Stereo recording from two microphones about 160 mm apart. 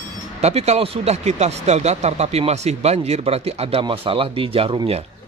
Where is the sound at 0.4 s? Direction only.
40° right (ahead or behind).